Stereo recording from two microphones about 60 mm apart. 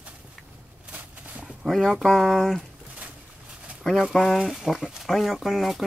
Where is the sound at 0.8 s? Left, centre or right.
Right.